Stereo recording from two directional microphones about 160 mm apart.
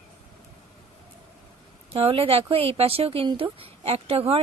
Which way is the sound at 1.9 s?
35° right (ahead or behind).